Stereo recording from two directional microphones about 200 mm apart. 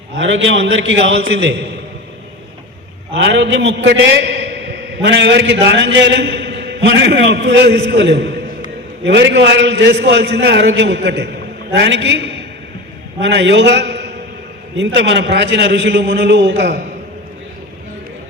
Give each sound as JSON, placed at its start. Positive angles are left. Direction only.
{"t": 0.2, "sound": "a man's voice", "side_deg": -65}
{"t": 3.2, "sound": "a man's voice", "side_deg": -65}